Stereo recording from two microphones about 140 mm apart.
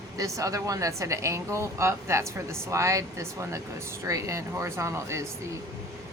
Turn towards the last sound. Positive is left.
turn(degrees=-20)  # may be behind; listen again after turning